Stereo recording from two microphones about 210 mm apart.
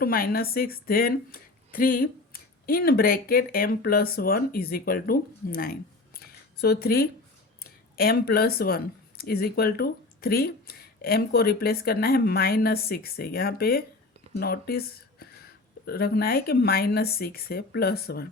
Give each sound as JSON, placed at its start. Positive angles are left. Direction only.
{"t": 0.0, "sound": "a woman's voice", "side_deg": 45}